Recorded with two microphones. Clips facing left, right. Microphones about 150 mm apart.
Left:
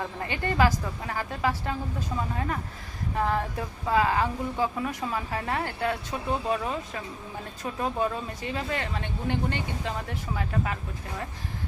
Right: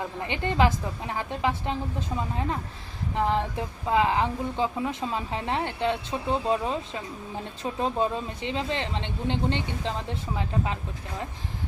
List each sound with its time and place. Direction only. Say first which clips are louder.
0.2 s speech: right 1 dB; 20° right (ahead or behind)